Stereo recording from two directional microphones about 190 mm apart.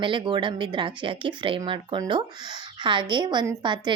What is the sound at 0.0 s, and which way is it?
Speech, 25° right (ahead or behind).